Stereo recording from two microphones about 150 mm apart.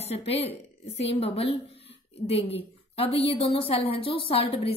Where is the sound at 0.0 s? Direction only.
45° left (ahead or behind).